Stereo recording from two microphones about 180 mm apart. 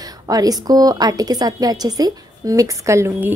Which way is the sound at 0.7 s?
20° right (ahead or behind).